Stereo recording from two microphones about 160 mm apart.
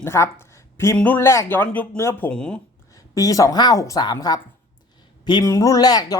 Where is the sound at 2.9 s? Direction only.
20° left (ahead or behind).